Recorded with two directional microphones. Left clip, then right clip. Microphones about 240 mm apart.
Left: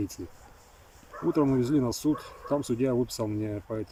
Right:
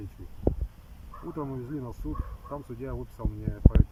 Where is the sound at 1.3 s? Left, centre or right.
Centre.